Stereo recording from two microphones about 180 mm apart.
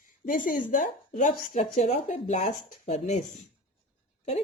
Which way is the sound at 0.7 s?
45° left (ahead or behind).